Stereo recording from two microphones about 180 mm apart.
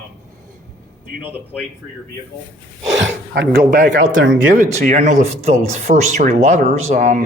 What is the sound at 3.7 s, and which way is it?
Speech, 60° right (ahead or behind).